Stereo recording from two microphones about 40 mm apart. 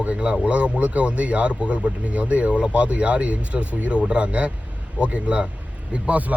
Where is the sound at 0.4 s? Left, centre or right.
Right.